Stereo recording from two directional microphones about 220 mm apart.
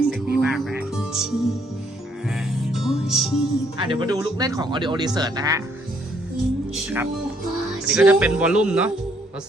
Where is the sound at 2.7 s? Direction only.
Centre (ahead or behind).